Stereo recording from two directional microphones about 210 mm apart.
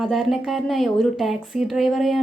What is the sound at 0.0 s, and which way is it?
Speech, centre (ahead or behind).